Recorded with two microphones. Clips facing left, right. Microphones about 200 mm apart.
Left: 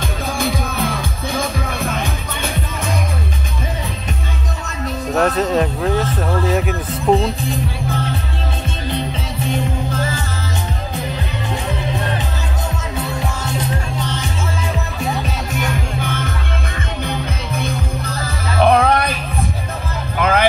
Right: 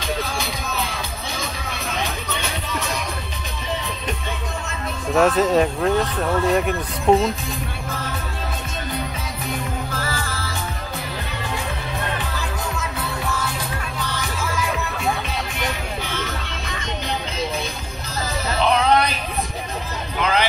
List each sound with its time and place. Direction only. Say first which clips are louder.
0.4 s music: left 7 dB; 50° left (ahead or behind)
5.1 s speech: even; centre (ahead or behind)
9.9 s music: left 5 dB; 20° left (ahead or behind)
13.4 s music: left 5 dB; 25° left (ahead or behind)
15.5 s music: left 5 dB; 50° left (ahead or behind)
18.6 s music: left 4 dB; 55° left (ahead or behind)
20.2 s music: left 4 dB; 50° left (ahead or behind)